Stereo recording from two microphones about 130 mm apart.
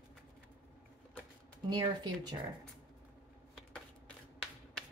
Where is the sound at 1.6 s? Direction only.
35° right (ahead or behind).